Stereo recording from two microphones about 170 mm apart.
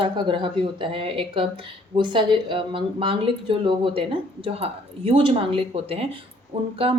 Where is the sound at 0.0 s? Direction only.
30° right (ahead or behind).